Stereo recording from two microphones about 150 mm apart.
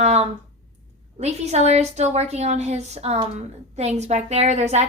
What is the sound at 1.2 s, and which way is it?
A woman's voice, 45° right (ahead or behind).